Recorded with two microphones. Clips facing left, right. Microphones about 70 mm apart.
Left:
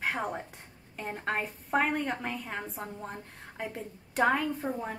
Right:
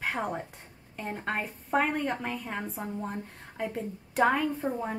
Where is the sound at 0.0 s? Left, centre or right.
Centre.